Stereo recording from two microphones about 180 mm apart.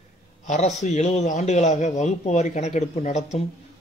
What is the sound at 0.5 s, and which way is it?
A man's voice, 40° left (ahead or behind).